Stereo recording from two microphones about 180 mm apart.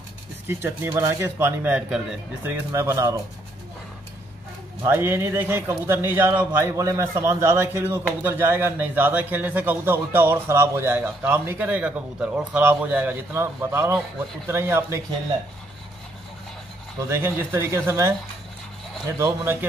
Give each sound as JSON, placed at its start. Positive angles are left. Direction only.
{"t": 0.5, "sound": "a man's voice", "side_deg": -10}
{"t": 4.8, "sound": "a man's voice", "side_deg": -15}
{"t": 17.1, "sound": "a man's voice", "side_deg": -10}